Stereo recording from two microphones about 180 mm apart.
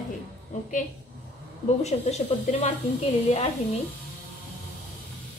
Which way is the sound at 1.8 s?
40° left (ahead or behind).